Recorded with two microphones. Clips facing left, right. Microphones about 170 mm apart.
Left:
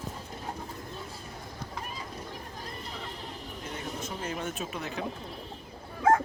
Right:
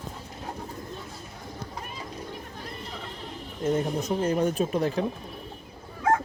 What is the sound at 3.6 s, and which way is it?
Speech, 40° right (ahead or behind).